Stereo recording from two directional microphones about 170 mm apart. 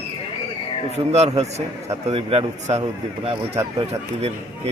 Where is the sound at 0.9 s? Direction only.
40° right (ahead or behind).